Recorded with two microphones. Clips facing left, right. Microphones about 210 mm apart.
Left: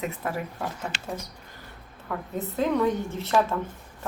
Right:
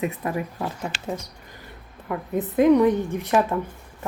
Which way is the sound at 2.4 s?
15° right (ahead or behind).